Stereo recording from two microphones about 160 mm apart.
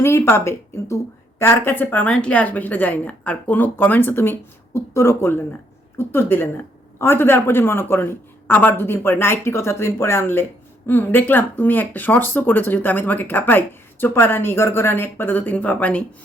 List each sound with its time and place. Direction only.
0.0 s speech: 15° left (ahead or behind)